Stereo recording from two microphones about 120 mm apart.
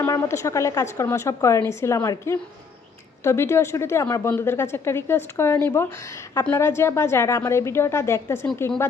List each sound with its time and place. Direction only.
0.0 s a woman's voice: 20° left (ahead or behind)